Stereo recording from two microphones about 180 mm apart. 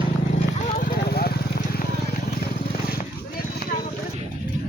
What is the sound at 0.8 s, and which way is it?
Vehicle, 55° left (ahead or behind).